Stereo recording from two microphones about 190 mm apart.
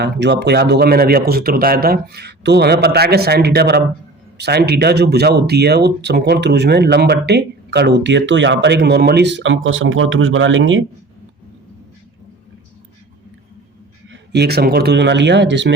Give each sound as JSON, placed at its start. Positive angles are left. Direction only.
{"t": 0.0, "sound": "speech", "side_deg": -65}
{"t": 14.1, "sound": "speech", "side_deg": -60}